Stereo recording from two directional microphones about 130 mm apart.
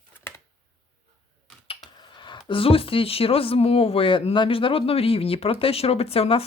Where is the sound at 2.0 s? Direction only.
35° left (ahead or behind).